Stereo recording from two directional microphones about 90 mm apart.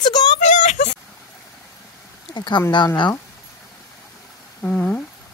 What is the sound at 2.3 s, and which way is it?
Speech, 60° left (ahead or behind).